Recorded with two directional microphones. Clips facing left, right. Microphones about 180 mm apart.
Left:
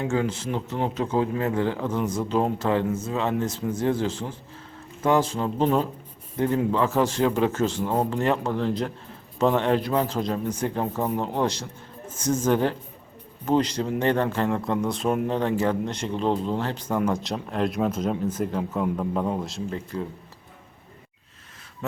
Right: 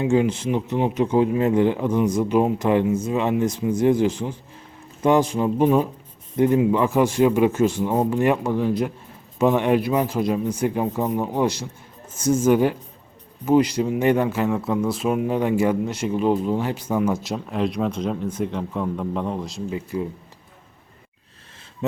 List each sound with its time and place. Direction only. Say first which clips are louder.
0.0 s speech: right 6 dB; 15° right (ahead or behind); by 19.6 s 5° left (ahead or behind)
19.7 s speech: right 7 dB; 10° right (ahead or behind)